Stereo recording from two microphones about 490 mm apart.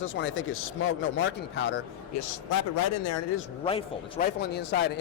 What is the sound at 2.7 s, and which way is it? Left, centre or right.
Speech, left.